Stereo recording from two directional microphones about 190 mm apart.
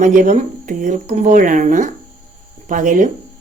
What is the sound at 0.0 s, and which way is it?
Speech, 45° right (ahead or behind).